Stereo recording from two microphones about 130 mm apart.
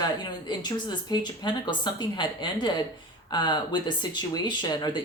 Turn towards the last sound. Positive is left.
turn(degrees=35)  # may be behind; listen again after turning